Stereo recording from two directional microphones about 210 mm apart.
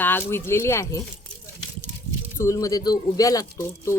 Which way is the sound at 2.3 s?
15° left (ahead or behind).